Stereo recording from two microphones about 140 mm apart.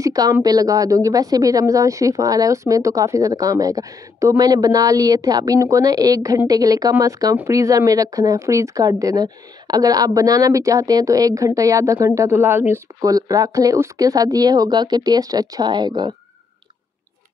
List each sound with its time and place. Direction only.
0.0 s a woman's voice: 25° right (ahead or behind)